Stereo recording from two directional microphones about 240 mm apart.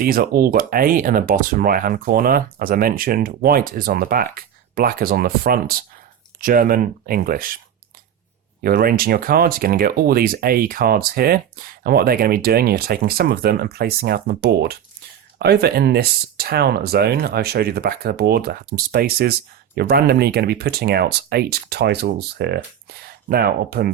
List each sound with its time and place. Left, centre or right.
0.0 s speech: right
8.6 s speech: right